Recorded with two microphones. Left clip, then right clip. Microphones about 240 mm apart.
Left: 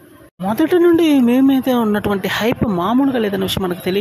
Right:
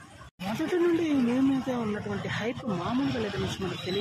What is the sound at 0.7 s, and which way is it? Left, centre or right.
Speech, left.